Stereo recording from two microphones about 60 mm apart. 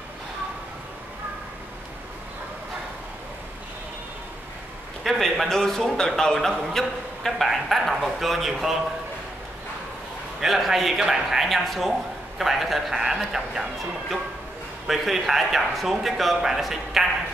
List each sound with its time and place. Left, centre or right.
5.0 s a man's voice: centre
10.4 s a man's voice: centre
14.9 s a man's voice: centre